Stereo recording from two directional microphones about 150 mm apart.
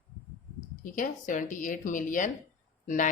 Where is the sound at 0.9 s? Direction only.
60° left (ahead or behind).